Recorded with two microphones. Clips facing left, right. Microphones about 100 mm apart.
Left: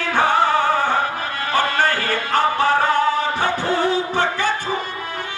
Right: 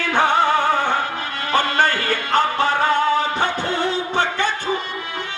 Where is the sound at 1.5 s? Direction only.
25° right (ahead or behind).